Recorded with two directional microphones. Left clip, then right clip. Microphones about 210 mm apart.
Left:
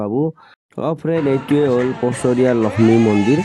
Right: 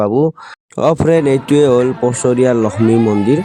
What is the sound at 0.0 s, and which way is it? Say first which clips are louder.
Speech: right 7 dB; 25° right (ahead or behind).